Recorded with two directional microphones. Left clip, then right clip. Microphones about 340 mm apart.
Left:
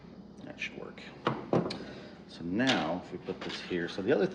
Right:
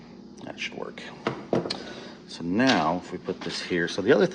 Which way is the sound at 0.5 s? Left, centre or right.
Centre.